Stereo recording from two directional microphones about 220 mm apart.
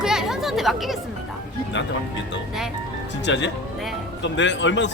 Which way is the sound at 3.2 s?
55° left (ahead or behind).